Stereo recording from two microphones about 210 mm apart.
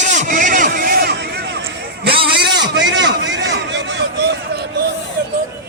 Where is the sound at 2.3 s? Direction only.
50° right (ahead or behind).